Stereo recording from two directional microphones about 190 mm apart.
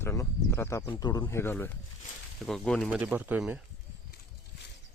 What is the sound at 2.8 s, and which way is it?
Speech, 5° right (ahead or behind).